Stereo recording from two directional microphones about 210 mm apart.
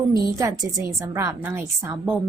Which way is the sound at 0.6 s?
15° right (ahead or behind).